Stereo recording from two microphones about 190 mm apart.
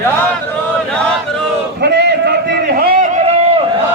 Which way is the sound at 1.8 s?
60° right (ahead or behind).